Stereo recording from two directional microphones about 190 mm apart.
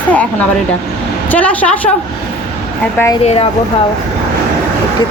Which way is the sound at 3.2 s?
35° left (ahead or behind).